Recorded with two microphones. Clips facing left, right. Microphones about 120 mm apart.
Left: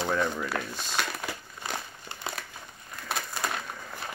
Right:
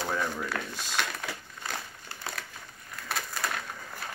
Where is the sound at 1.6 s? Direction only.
20° left (ahead or behind).